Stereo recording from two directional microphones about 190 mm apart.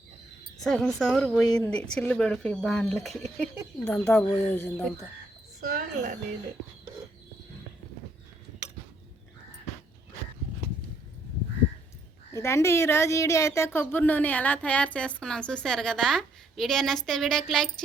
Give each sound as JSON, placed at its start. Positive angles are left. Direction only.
{"t": 0.6, "sound": "speech", "side_deg": 0}
{"t": 5.5, "sound": "a woman's voice", "side_deg": -50}
{"t": 12.3, "sound": "speech", "side_deg": 15}